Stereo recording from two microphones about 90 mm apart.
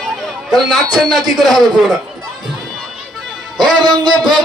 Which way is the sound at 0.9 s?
Centre (ahead or behind).